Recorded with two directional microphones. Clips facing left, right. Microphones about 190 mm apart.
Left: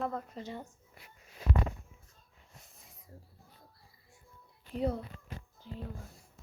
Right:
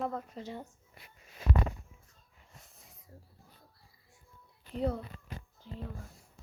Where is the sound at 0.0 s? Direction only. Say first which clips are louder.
Even; 5° right (ahead or behind).